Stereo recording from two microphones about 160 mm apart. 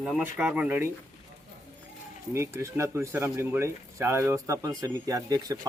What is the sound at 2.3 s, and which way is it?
Speech, 15° right (ahead or behind).